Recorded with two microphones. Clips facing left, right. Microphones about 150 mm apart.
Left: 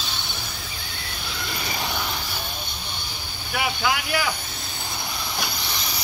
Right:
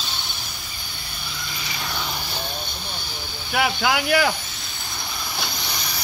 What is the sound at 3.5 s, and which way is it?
Speech, 75° right (ahead or behind).